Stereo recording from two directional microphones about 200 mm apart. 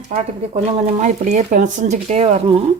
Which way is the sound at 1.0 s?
40° right (ahead or behind).